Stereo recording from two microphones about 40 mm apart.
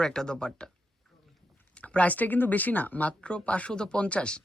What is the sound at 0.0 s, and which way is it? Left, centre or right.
Speech, centre.